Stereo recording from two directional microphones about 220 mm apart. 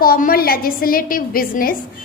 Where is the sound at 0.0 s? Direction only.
40° left (ahead or behind).